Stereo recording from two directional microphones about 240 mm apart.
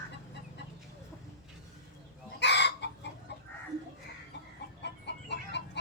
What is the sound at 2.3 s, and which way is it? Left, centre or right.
Chicken, left.